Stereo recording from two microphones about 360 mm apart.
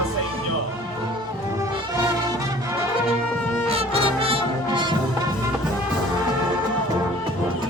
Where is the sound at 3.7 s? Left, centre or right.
Centre.